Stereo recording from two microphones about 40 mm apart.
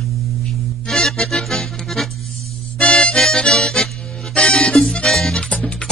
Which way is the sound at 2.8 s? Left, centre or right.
Left.